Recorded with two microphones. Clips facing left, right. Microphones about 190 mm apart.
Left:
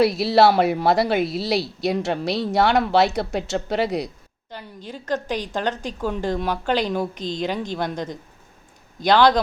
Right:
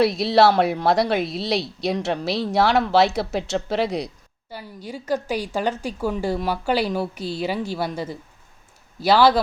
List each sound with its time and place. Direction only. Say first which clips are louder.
0.0 s speech: even; centre (ahead or behind)